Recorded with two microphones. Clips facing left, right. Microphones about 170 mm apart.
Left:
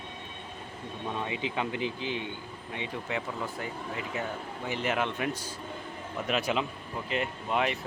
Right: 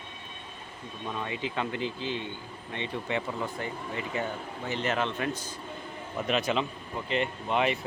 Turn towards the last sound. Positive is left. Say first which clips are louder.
# right 2 dB
turn(degrees=0)  # may be behind; listen again after turning